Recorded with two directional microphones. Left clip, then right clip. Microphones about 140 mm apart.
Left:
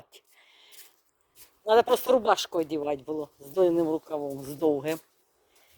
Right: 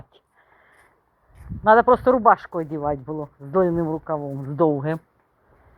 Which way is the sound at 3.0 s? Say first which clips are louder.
Right 2 dB; 35° left (ahead or behind).